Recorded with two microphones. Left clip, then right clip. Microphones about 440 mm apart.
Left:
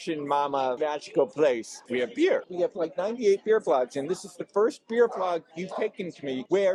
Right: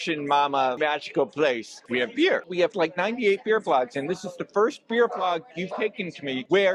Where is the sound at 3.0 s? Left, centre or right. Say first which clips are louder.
Even; centre.